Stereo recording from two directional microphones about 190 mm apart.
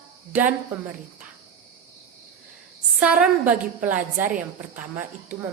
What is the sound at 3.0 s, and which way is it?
A woman's voice, 5° right (ahead or behind).